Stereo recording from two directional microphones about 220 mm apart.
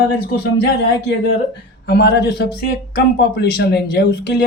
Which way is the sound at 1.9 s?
50° left (ahead or behind).